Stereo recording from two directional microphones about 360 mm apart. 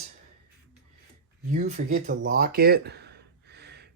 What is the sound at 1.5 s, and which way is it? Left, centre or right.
Speech, centre.